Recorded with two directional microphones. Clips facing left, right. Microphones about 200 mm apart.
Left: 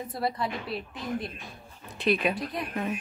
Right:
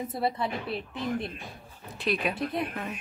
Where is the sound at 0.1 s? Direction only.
25° right (ahead or behind).